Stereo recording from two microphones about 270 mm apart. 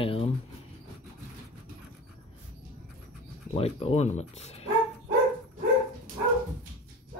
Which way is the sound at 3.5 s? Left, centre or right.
Left.